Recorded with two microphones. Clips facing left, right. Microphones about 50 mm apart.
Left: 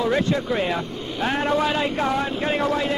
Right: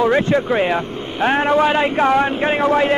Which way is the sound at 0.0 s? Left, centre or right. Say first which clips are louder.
Right 6 dB; right.